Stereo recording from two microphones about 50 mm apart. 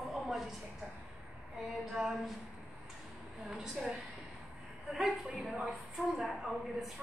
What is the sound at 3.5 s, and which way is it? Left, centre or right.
Speech, centre.